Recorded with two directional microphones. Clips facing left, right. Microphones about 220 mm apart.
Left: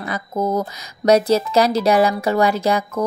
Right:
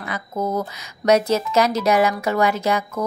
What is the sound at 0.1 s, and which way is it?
Speech, 35° left (ahead or behind).